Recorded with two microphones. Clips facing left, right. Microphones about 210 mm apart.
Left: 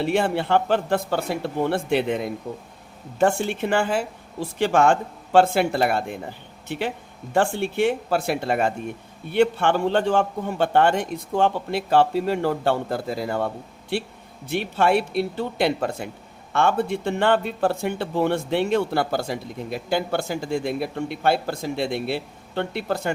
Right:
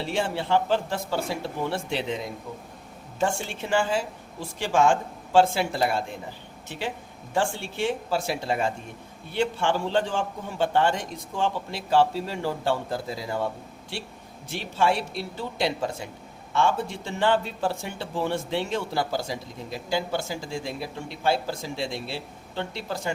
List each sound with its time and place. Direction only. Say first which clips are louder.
0.0 s speech: left 6 dB; 60° left (ahead or behind)
14.5 s speech: left 5 dB; 60° left (ahead or behind)